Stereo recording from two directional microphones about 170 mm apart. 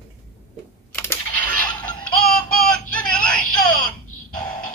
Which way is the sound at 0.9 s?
15° left (ahead or behind).